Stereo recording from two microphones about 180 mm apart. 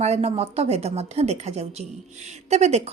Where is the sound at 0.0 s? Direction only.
35° right (ahead or behind).